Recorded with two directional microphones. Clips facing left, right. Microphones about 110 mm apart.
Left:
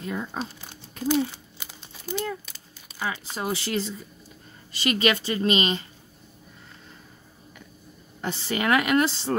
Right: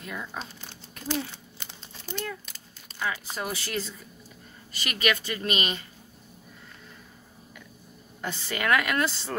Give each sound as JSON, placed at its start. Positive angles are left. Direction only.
{"t": 0.0, "sound": "a woman's voice", "side_deg": 30}
{"t": 0.4, "sound": "speech", "side_deg": 10}
{"t": 1.6, "sound": "crumpling", "side_deg": 10}
{"t": 2.4, "sound": "a sound", "side_deg": 0}
{"t": 3.3, "sound": "a woman's voice", "side_deg": 25}
{"t": 8.2, "sound": "a woman's voice", "side_deg": 30}